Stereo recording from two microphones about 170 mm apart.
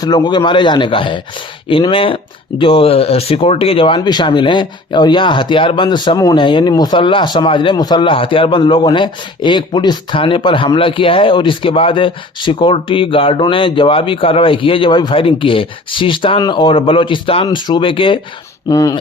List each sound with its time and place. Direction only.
0.0 s speech: 25° left (ahead or behind)
18.7 s speech: 20° left (ahead or behind)